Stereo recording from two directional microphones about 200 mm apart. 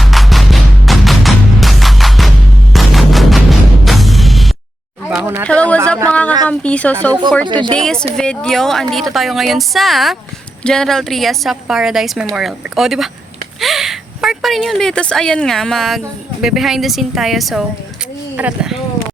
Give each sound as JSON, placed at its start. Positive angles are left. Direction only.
{"t": 0.0, "sound": "music", "side_deg": 0}
{"t": 2.7, "sound": "fusillade", "side_deg": 0}
{"t": 3.8, "sound": "music", "side_deg": 0}
{"t": 5.0, "sound": "a sound", "side_deg": -10}
{"t": 5.5, "sound": "a sound", "side_deg": 5}
{"t": 6.5, "sound": "a woman's voice", "side_deg": 5}
{"t": 7.4, "sound": "speech", "side_deg": -25}
{"t": 7.8, "sound": "a woman's voice", "side_deg": 5}